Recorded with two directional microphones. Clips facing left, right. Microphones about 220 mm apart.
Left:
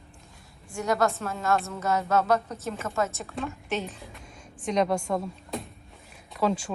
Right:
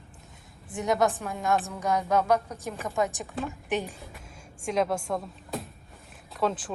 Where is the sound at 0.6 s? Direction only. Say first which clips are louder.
Even; 20° right (ahead or behind).